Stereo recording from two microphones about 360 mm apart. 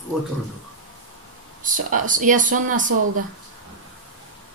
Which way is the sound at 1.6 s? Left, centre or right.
Right.